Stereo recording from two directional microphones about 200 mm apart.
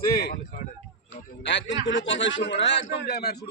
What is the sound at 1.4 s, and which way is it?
A man's voice, 60° left (ahead or behind).